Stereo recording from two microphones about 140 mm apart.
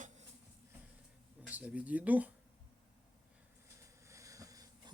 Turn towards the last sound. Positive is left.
turn(degrees=-25)  # may be behind; listen again after turning